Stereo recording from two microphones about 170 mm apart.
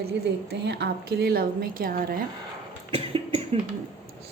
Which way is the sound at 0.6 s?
75° right (ahead or behind).